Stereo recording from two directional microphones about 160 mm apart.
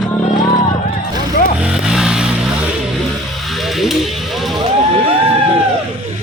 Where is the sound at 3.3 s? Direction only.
Centre (ahead or behind).